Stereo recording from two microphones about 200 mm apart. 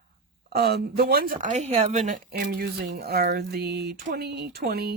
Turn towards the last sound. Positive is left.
turn(degrees=-50)  # may be behind; listen again after turning